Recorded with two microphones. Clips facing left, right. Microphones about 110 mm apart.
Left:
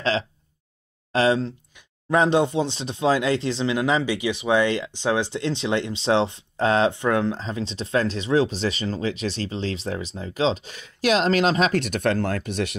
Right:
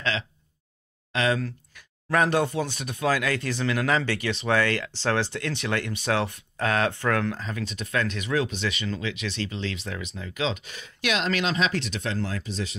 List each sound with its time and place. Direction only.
1.1 s speech: 30° left (ahead or behind)
11.8 s speech: 60° left (ahead or behind)